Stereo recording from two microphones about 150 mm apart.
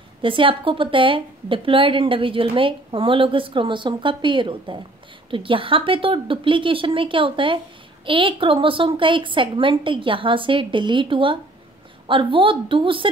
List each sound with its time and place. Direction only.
0.2 s a woman's voice: 35° right (ahead or behind)